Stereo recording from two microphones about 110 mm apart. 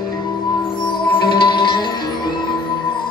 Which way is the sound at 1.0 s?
45° left (ahead or behind).